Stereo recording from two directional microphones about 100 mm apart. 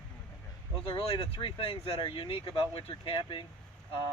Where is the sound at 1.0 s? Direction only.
65° left (ahead or behind).